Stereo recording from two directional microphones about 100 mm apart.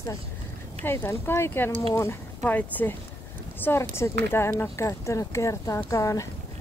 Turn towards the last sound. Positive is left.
turn(degrees=30)  # may be behind; listen again after turning